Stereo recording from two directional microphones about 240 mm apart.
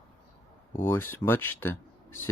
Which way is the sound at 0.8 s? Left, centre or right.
Centre.